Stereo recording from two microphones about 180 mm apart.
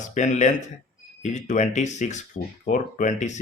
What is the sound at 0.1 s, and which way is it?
Speech, 40° left (ahead or behind).